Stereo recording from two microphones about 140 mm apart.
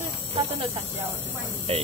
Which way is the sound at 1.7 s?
45° right (ahead or behind).